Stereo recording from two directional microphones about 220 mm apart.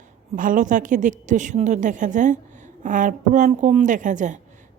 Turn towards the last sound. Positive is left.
turn(degrees=-35)  # may be behind; listen again after turning